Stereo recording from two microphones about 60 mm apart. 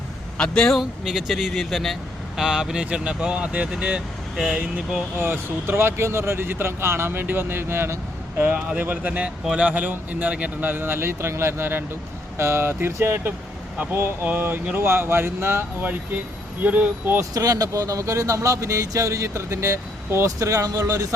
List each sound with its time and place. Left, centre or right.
0.3 s a man's voice: centre
0.8 s speech: centre
5.1 s speech: right
8.4 s a man's voice: right
16.6 s speech: right
17.3 s speech: right